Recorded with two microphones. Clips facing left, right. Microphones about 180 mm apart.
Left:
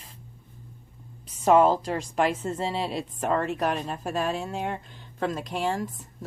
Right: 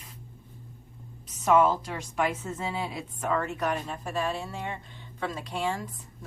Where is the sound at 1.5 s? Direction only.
35° left (ahead or behind).